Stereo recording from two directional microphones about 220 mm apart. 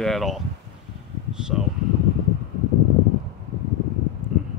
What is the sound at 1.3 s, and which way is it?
Speech, 5° right (ahead or behind).